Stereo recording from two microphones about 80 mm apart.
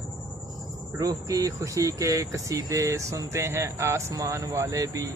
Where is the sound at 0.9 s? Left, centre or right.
Right.